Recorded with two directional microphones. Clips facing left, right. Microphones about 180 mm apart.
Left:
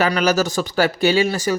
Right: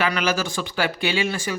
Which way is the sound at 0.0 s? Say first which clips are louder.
Left 5 dB; 40° left (ahead or behind).